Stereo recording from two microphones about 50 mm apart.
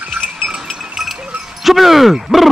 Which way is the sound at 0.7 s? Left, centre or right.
Centre.